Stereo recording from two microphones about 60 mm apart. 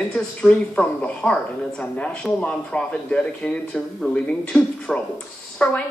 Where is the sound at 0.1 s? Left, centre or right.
Centre.